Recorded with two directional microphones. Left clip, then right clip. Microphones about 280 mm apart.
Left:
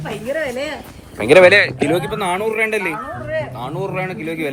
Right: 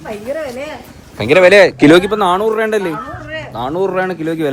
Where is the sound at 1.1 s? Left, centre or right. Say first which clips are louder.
Right 1 dB; centre.